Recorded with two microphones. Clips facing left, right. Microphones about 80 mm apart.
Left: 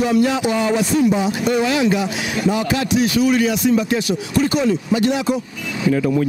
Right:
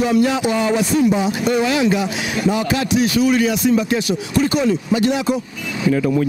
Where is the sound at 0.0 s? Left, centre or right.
Centre.